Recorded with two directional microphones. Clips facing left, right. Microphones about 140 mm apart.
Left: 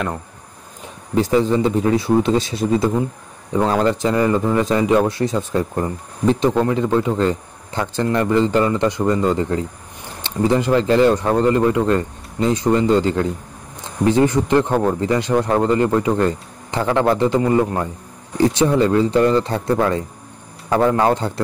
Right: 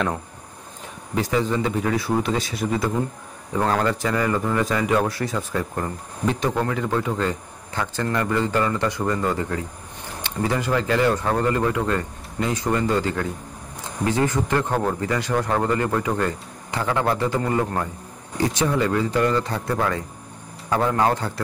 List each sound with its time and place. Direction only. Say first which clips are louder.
1.1 s a man's voice: left 6 dB; 30° left (ahead or behind)
18.4 s speech: left 6 dB; 25° left (ahead or behind)